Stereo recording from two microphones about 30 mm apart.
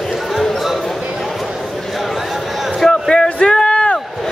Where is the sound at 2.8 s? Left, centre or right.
Centre.